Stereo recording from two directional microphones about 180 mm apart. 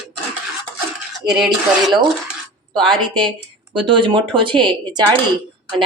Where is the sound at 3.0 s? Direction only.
25° right (ahead or behind).